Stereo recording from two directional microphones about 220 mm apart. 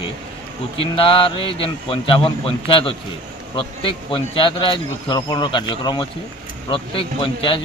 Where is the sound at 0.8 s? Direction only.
25° left (ahead or behind).